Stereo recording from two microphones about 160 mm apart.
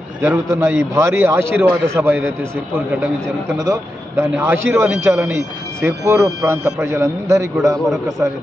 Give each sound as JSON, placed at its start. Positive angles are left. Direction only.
{"t": 0.2, "sound": "a man's voice", "side_deg": -15}
{"t": 3.5, "sound": "a man's voice", "side_deg": -20}